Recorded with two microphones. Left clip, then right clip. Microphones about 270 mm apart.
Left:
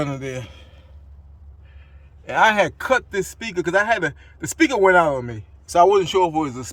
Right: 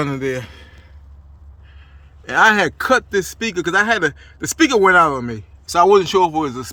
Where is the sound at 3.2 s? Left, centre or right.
Centre.